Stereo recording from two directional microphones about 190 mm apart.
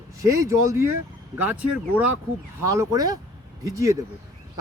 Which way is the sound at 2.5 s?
15° right (ahead or behind).